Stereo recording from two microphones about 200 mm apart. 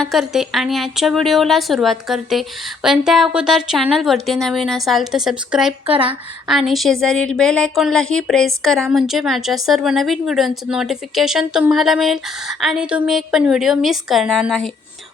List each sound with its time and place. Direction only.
0.0 s a woman's voice: centre (ahead or behind)
5.8 s speech: 25° right (ahead or behind)
6.5 s a woman's voice: centre (ahead or behind)